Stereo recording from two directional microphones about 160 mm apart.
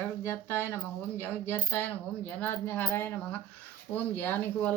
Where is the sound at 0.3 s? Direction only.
15° left (ahead or behind).